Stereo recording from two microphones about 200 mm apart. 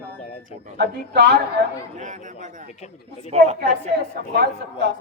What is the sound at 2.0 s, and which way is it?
Speech, 40° right (ahead or behind).